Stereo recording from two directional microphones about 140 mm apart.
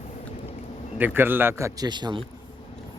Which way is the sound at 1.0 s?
15° right (ahead or behind).